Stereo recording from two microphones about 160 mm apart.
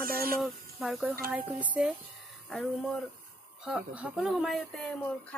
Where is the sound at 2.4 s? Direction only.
5° left (ahead or behind).